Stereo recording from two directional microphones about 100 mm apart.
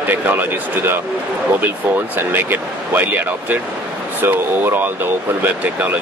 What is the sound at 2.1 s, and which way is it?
Speech, 20° right (ahead or behind).